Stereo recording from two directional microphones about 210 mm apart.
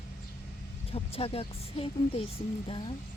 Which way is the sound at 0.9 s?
25° left (ahead or behind).